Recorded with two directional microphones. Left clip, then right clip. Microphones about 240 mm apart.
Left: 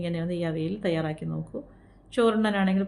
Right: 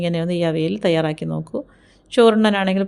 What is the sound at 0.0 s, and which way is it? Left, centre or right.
A woman's voice, right.